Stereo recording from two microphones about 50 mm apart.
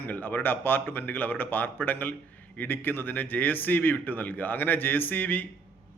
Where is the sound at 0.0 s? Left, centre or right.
Left.